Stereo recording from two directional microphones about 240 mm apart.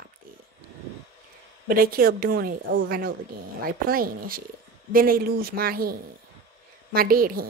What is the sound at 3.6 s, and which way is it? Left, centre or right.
A woman's voice, right.